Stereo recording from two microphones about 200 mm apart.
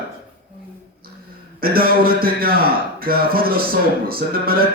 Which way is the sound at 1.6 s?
50° right (ahead or behind).